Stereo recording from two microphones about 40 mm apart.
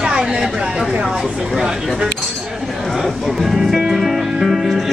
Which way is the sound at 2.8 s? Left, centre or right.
Centre.